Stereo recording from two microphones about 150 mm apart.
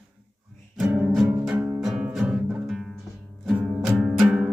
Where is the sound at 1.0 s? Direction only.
5° right (ahead or behind).